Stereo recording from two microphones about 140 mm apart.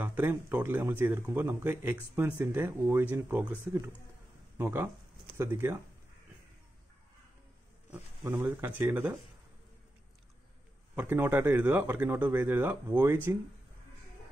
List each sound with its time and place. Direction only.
0.0 s speech: 15° right (ahead or behind)
8.2 s speech: 15° right (ahead or behind)
11.0 s speech: 15° right (ahead or behind)